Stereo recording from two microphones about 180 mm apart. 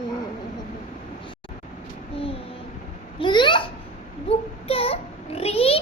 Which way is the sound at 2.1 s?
30° left (ahead or behind).